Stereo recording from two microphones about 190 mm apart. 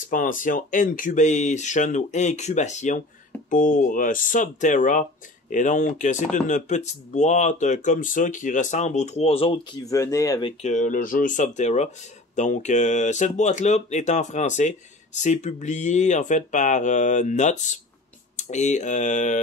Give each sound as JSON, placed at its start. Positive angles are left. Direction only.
{"t": 0.1, "sound": "speech", "side_deg": 45}
{"t": 9.8, "sound": "speech", "side_deg": 15}
{"t": 10.6, "sound": "speech", "side_deg": 40}